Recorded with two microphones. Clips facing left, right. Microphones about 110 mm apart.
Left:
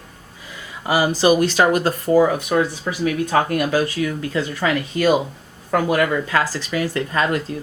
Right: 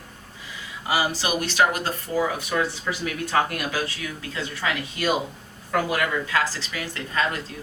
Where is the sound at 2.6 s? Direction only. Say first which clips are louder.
Left 6 dB; 25° left (ahead or behind).